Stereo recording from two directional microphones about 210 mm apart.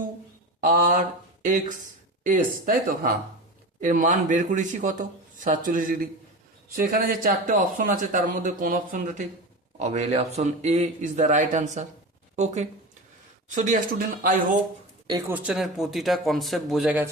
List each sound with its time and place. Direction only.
0.6 s a man's voice: 40° right (ahead or behind)
13.5 s a man's voice: 35° right (ahead or behind)
15.3 s speech: 5° right (ahead or behind)